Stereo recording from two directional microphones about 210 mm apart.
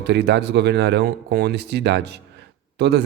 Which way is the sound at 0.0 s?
50° right (ahead or behind).